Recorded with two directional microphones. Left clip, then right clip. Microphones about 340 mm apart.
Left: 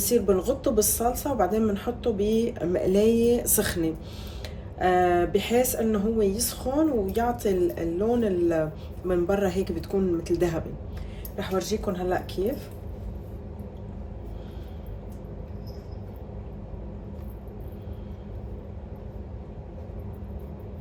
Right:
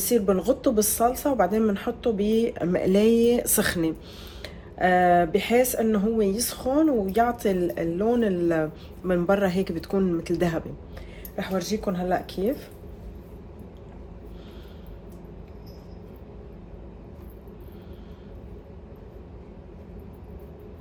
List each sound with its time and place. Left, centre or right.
0.0 s a woman's voice: right